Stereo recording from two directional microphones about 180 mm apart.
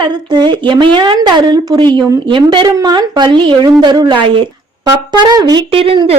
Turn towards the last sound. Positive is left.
turn(degrees=-30)  # may be behind; listen again after turning